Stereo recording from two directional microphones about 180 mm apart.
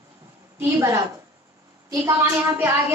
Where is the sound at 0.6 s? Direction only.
15° right (ahead or behind).